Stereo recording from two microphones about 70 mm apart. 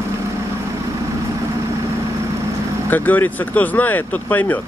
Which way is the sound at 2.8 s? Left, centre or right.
Left.